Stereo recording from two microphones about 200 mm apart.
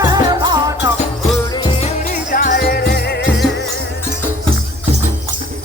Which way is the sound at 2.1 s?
40° left (ahead or behind).